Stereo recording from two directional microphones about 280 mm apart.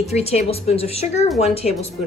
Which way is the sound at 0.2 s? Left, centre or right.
Left.